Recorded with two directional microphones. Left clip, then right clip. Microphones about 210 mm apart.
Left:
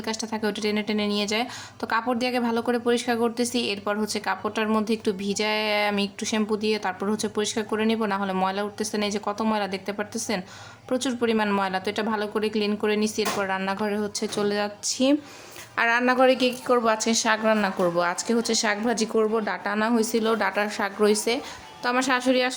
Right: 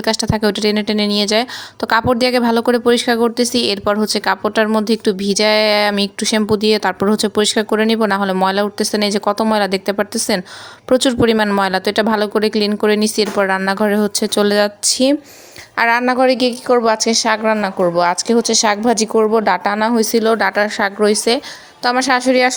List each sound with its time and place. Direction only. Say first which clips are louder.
0.0 s a woman's voice: right 12 dB; 35° right (ahead or behind)